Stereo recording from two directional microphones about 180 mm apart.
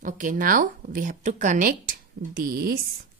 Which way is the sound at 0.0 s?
45° right (ahead or behind).